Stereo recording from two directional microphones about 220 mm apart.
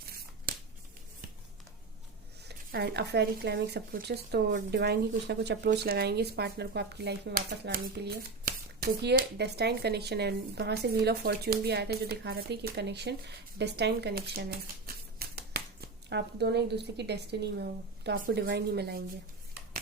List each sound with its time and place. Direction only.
2.5 s speech: 50° right (ahead or behind)
15.2 s a sound: 45° right (ahead or behind)
16.0 s speech: 50° right (ahead or behind)